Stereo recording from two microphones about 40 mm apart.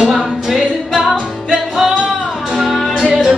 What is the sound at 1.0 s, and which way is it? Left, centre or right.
Music, centre.